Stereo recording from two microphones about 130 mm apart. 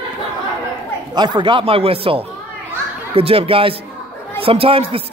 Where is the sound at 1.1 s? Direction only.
35° right (ahead or behind).